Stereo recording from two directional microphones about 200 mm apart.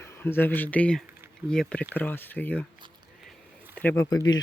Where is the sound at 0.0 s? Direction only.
10° left (ahead or behind).